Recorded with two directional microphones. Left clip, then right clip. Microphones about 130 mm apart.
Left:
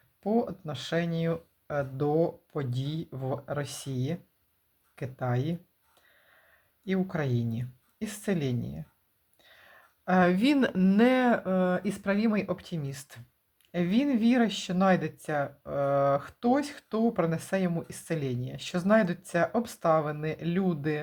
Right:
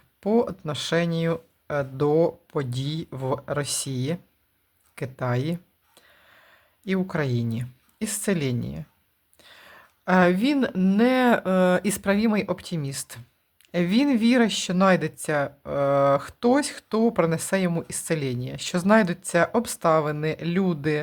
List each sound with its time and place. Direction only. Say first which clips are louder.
0.2 s speech: right 6 dB; 35° right (ahead or behind)
4.9 s a sound: right 5 dB; 30° right (ahead or behind)
6.8 s a woman's voice: right 5 dB; 30° right (ahead or behind)
9.4 s a sound: right 7 dB; 30° right (ahead or behind)
10.3 s speech: right 2 dB; centre (ahead or behind)
11.2 s speech: right 6 dB; 25° right (ahead or behind)
12.0 s speech: right 3 dB; 20° right (ahead or behind)